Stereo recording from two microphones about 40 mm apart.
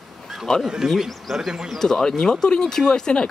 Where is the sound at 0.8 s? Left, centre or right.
Centre.